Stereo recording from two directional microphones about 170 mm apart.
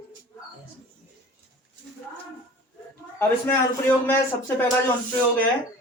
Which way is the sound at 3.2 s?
10° left (ahead or behind).